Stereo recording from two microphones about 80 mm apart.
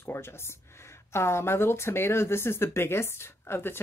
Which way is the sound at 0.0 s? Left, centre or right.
Left.